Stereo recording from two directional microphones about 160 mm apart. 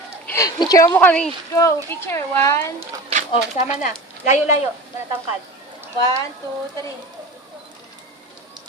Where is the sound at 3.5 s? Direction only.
45° left (ahead or behind).